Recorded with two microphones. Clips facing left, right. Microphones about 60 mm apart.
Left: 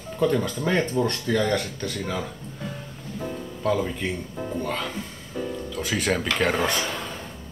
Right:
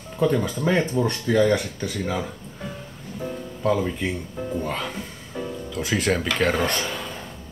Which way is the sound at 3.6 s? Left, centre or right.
Centre.